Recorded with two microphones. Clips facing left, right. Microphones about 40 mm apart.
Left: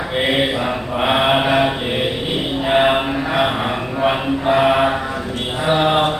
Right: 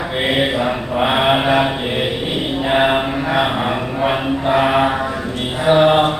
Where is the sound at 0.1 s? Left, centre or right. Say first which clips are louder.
Even; centre.